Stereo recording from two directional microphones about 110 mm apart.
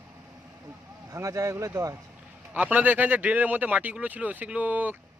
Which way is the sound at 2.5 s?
15° right (ahead or behind).